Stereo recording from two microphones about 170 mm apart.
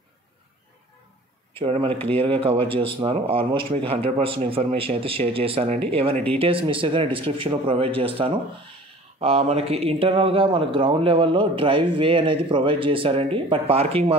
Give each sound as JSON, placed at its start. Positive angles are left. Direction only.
{"t": 1.6, "sound": "a man's voice", "side_deg": -35}